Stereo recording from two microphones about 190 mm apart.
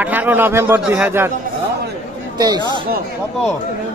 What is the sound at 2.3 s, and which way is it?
Speech, 20° right (ahead or behind).